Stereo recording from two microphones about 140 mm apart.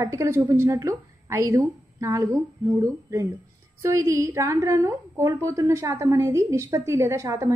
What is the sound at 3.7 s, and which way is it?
A woman's voice, 20° right (ahead or behind).